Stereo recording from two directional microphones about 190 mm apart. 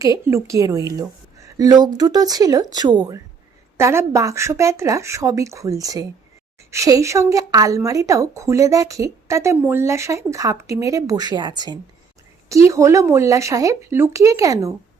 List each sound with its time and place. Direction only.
0.0 s a woman's voice: 15° right (ahead or behind)